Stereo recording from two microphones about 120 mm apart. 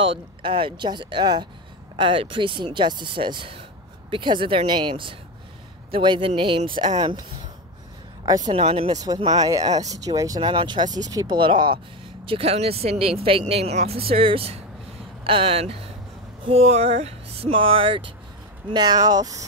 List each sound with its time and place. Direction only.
0.0 s speech: 45° right (ahead or behind)
8.5 s speech: 55° right (ahead or behind)
9.4 s speech: 30° right (ahead or behind)
10.4 s speech: 40° right (ahead or behind)
12.3 s speech: 55° right (ahead or behind)
18.7 s speech: 35° right (ahead or behind)